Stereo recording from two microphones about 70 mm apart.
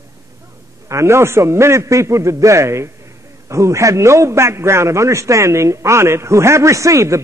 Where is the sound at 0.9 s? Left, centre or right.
Right.